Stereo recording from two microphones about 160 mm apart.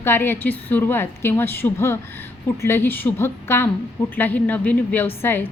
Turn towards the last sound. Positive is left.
turn(degrees=15)  # may be behind; listen again after turning